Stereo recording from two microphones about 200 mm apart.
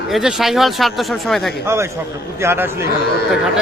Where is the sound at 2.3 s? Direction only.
10° right (ahead or behind).